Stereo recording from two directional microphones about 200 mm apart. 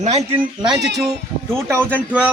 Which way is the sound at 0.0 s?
35° right (ahead or behind).